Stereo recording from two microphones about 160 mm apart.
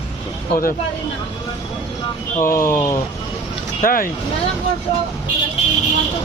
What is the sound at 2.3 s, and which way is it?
Speech, 60° left (ahead or behind).